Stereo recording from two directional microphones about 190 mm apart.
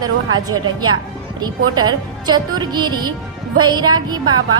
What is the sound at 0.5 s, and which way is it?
A woman's voice, 20° right (ahead or behind).